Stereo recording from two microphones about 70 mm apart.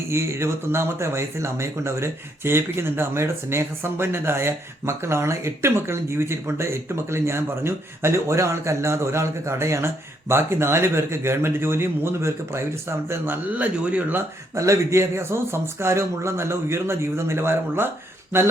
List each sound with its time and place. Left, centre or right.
0.1 s speech: right
13.5 s speech: right
14.5 s speech: right